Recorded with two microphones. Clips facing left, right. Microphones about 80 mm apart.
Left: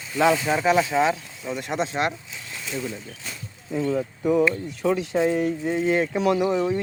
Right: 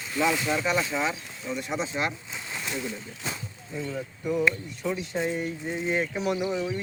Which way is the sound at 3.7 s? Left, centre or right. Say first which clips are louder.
Left 9 dB; left.